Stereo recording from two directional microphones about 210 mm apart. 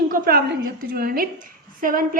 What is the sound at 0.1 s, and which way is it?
A woman's voice, 45° right (ahead or behind).